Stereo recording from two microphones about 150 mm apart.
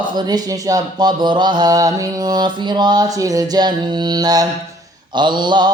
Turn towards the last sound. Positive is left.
turn(degrees=-30)  # may be behind; listen again after turning